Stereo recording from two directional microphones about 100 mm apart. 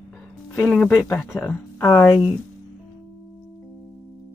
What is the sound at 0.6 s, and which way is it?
Speech, centre (ahead or behind).